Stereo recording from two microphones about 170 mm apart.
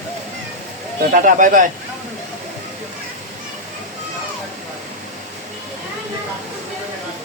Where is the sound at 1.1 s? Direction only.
50° right (ahead or behind).